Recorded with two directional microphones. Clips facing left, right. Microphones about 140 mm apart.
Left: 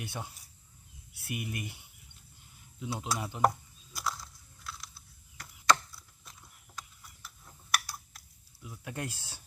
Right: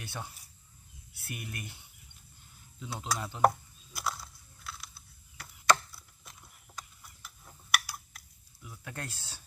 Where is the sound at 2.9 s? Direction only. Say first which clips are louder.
Even; 15° left (ahead or behind).